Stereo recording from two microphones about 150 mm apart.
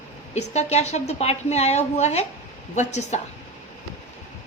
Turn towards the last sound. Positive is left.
turn(degrees=50)  # may be behind; listen again after turning